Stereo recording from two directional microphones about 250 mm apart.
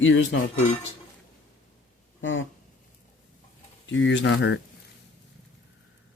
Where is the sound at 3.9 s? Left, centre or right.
Left.